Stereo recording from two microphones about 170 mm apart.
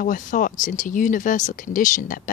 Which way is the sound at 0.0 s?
50° left (ahead or behind).